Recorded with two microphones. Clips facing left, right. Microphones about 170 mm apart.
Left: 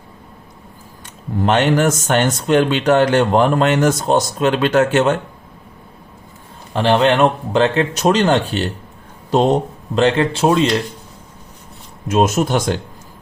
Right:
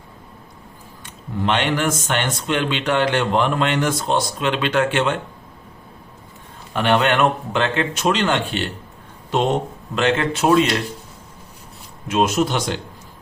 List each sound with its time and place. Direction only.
1.5 s speech: 45° left (ahead or behind)
6.7 s speech: 30° left (ahead or behind)
12.0 s speech: 45° left (ahead or behind)